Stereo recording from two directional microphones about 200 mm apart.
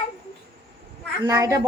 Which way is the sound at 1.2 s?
20° right (ahead or behind).